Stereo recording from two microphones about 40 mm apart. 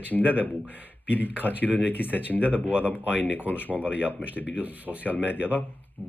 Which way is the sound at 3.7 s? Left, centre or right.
Right.